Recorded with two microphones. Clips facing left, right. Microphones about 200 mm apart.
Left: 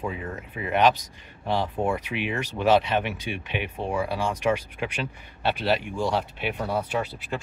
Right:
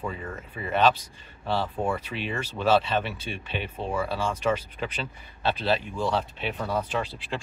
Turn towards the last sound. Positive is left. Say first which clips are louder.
# left 1 dB
turn(degrees=10)  # may be behind; listen again after turning